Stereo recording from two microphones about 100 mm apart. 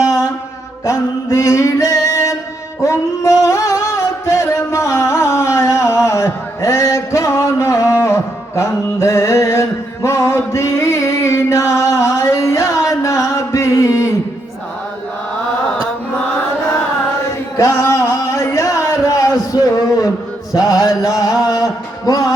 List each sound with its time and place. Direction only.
0.9 s music: 30° left (ahead or behind)
17.6 s a sound: 30° left (ahead or behind)
20.5 s music: 35° left (ahead or behind)